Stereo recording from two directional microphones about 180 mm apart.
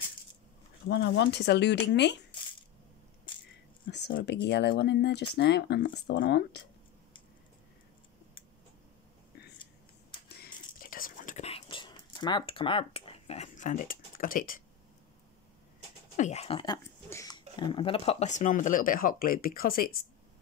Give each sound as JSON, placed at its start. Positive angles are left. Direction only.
{"t": 0.8, "sound": "speech", "side_deg": 70}
{"t": 3.9, "sound": "speech", "side_deg": 65}
{"t": 10.2, "sound": "whispering", "side_deg": 55}
{"t": 16.2, "sound": "speech", "side_deg": 40}